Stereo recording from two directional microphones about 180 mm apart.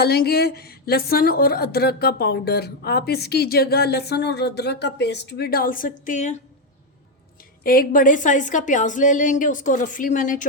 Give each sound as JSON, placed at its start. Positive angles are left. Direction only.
{"t": 0.0, "sound": "a woman's voice", "side_deg": 60}
{"t": 7.6, "sound": "a woman's voice", "side_deg": 55}